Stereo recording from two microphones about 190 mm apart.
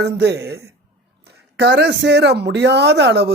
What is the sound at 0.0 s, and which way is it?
Speech, 60° right (ahead or behind).